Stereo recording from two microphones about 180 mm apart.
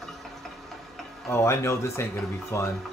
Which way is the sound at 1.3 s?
15° left (ahead or behind).